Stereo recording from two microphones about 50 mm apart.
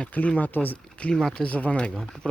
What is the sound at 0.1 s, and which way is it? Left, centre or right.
Speech, left.